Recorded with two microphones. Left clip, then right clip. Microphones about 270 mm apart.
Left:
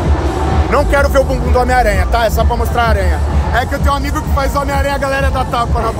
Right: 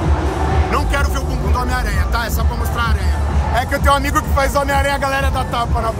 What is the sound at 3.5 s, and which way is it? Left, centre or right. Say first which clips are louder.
Speech: even; centre.